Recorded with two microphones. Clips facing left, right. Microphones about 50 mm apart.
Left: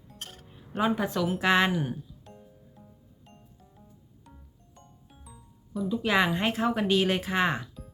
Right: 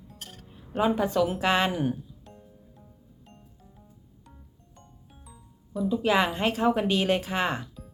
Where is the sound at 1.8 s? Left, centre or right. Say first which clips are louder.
Right 4 dB; centre.